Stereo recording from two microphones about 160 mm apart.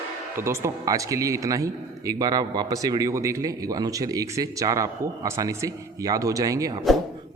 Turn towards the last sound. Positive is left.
turn(degrees=-20)  # may be behind; listen again after turning